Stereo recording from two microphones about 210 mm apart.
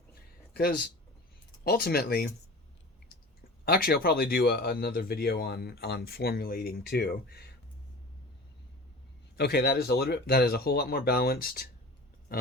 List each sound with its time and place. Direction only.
0.5 s speech: 50° left (ahead or behind)
3.7 s speech: 45° left (ahead or behind)
9.4 s speech: 50° left (ahead or behind)
12.3 s grunt: 45° left (ahead or behind)